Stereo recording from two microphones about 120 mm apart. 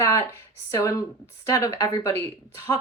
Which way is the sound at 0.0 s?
25° left (ahead or behind).